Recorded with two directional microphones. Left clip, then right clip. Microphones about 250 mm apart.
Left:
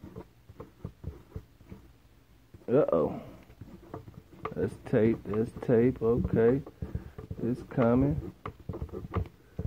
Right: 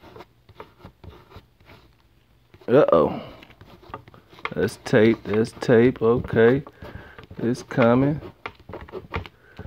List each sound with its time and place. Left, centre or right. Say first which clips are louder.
2.6 s speech: right 9 dB; right
4.6 s speech: right 9 dB; right